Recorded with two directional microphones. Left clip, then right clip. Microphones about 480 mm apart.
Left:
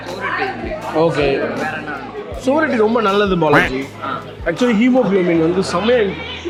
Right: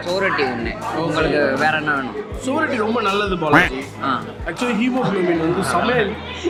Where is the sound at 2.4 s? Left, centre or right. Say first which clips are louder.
Left 5 dB; left.